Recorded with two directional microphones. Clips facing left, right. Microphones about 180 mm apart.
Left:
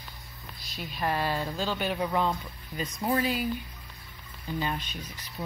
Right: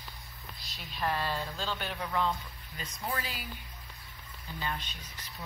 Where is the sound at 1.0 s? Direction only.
10° left (ahead or behind).